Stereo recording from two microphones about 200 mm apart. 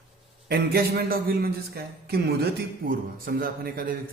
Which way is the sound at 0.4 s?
50° right (ahead or behind).